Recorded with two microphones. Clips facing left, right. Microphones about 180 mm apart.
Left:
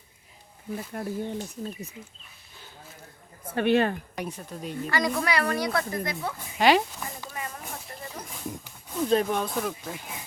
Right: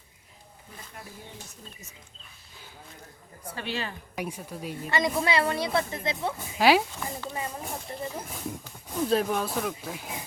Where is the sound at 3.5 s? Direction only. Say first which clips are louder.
Left 12 dB; 55° left (ahead or behind).